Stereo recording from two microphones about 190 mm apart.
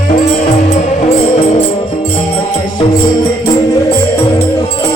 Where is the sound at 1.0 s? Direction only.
30° left (ahead or behind).